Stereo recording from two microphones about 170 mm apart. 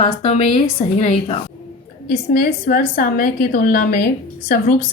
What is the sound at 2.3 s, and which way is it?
A woman's voice, 55° left (ahead or behind).